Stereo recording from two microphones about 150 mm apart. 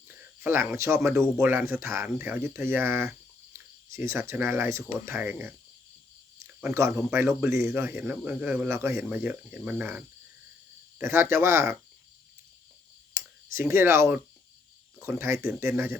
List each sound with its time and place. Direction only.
0.1 s speech: 15° right (ahead or behind)
6.6 s speech: 20° right (ahead or behind)
13.1 s speech: 15° right (ahead or behind)